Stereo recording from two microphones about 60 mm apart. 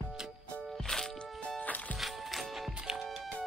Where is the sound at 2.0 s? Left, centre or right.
Centre.